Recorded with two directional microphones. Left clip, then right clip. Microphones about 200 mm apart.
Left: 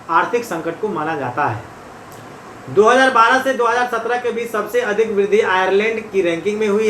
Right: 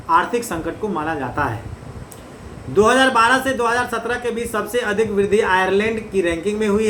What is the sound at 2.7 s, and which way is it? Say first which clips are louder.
A man's voice: left 3 dB; 30° right (ahead or behind).